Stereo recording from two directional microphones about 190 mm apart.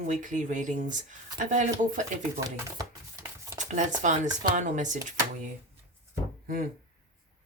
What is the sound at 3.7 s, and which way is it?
Speech, 40° right (ahead or behind).